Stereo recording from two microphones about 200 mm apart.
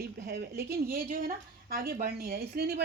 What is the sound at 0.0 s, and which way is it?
A woman's voice, 50° right (ahead or behind).